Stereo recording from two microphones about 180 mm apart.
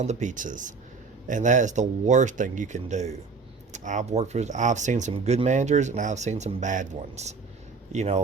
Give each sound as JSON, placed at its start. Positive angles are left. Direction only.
{"t": 0.0, "sound": "speech", "side_deg": -40}